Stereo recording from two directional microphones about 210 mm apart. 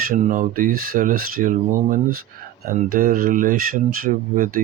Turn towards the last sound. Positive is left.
turn(degrees=-40)  # may be behind; listen again after turning